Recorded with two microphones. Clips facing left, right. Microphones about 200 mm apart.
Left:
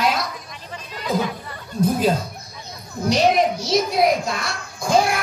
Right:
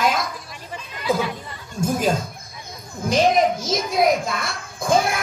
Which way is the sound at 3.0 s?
50° right (ahead or behind).